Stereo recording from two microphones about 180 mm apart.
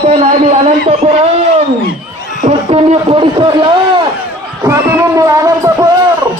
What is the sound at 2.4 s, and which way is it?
A man's voice, 35° right (ahead or behind).